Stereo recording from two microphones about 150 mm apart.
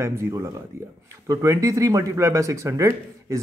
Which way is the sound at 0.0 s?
20° right (ahead or behind).